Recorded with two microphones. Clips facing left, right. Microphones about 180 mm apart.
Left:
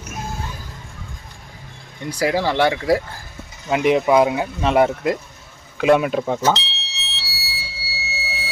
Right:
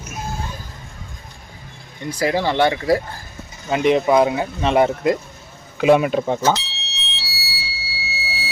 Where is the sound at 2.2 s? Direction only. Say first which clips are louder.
Even; 5° left (ahead or behind).